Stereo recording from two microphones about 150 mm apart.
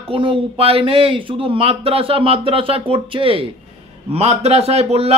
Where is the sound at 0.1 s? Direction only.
35° right (ahead or behind).